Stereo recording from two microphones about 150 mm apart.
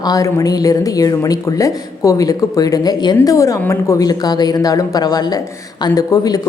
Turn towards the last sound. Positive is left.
turn(degrees=25)  # may be behind; listen again after turning